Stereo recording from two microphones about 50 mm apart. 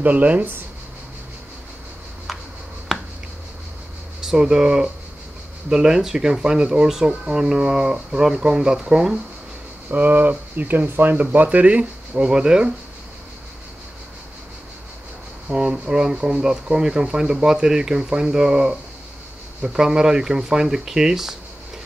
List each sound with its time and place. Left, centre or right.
0.0 s speech: right
2.3 s a sound: centre
4.2 s speech: centre
9.8 s speech: right
12.3 s speech: centre
15.4 s speech: centre